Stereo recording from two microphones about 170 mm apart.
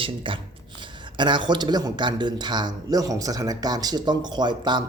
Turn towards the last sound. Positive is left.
turn(degrees=-25)  # may be behind; listen again after turning